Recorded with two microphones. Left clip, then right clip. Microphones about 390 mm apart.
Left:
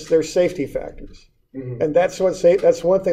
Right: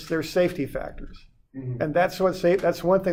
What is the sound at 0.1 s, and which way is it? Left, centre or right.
Speech, right.